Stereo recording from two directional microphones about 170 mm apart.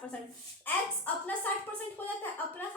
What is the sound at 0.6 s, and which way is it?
A woman's voice, 10° left (ahead or behind).